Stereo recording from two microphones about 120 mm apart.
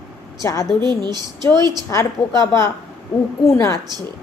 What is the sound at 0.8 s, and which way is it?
Speech, 35° right (ahead or behind).